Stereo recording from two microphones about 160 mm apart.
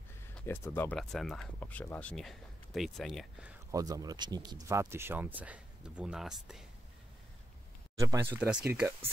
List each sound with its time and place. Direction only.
0.5 s speech: 10° left (ahead or behind)
3.7 s speech: 25° right (ahead or behind); by 6.6 s 5° right (ahead or behind)
8.0 s speech: 20° right (ahead or behind)